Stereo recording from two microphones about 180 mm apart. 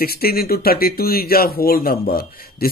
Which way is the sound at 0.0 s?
60° left (ahead or behind).